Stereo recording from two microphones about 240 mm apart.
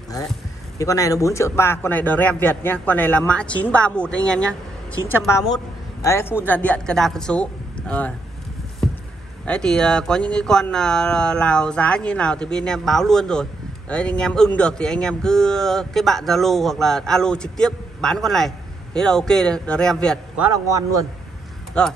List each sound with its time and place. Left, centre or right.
0.7 s speech: centre
9.5 s speech: centre
21.8 s speech: centre